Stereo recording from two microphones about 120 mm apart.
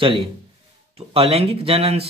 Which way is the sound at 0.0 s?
50° right (ahead or behind).